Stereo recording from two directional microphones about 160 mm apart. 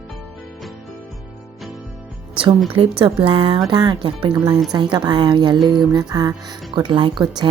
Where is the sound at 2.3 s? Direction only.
35° right (ahead or behind).